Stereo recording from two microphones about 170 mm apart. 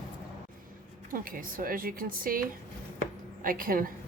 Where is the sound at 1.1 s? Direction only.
55° right (ahead or behind).